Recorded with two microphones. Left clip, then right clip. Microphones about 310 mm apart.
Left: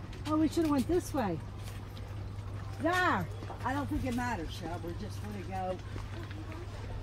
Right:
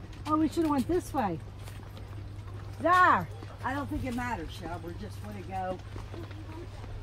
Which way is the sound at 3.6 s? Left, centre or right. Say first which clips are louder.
Right 1 dB; centre.